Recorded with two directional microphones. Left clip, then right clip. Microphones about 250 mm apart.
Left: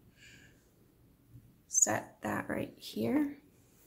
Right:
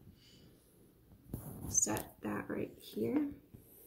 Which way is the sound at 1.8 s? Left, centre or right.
Left.